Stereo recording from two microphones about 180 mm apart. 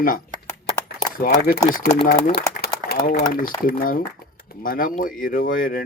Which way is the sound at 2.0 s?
60° left (ahead or behind).